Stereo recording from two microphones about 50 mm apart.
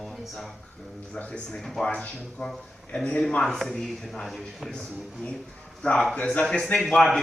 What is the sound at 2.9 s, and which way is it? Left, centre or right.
Speech, centre.